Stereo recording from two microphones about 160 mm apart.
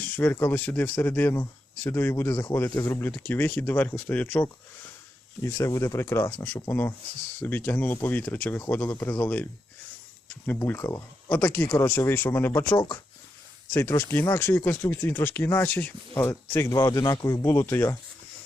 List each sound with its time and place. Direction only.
0.0 s speech: 10° left (ahead or behind)
5.4 s speech: 20° left (ahead or behind)
13.7 s speech: 15° left (ahead or behind)